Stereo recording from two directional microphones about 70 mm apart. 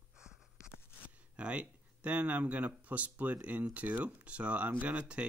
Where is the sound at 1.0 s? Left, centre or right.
Centre.